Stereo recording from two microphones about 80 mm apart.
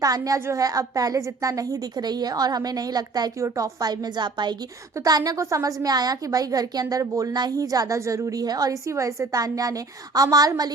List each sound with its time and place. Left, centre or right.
0.0 s a woman's voice: right
3.4 s a woman's voice: right
4.9 s a woman's voice: right